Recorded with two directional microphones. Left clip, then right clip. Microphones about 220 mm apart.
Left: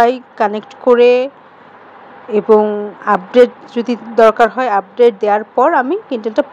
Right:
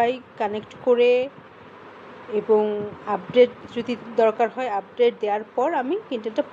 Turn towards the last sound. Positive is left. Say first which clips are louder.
# left 9 dB
turn(degrees=20)  # may be behind; listen again after turning